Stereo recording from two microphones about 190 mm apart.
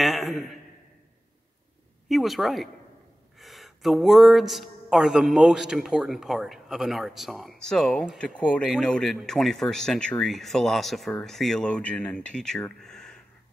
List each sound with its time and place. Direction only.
0.0 s a man's voice: centre (ahead or behind)
2.0 s speech: centre (ahead or behind)